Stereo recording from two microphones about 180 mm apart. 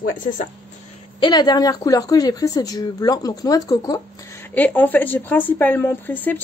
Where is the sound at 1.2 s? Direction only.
25° left (ahead or behind).